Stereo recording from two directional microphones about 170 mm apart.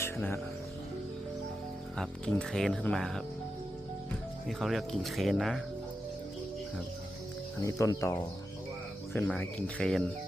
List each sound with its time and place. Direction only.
0.0 s music: 15° left (ahead or behind)
2.0 s speech: 5° left (ahead or behind)
4.4 s speech: centre (ahead or behind)
7.6 s speech: 20° left (ahead or behind)
9.1 s speech: 10° left (ahead or behind)